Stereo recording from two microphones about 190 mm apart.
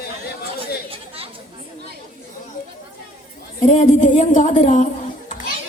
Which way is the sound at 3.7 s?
40° left (ahead or behind).